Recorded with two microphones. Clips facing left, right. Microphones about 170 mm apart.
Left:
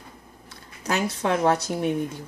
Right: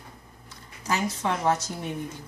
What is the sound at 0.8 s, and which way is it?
Speech, 70° left (ahead or behind).